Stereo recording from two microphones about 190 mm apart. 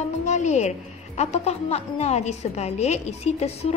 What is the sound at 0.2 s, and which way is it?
A woman's voice, 40° left (ahead or behind).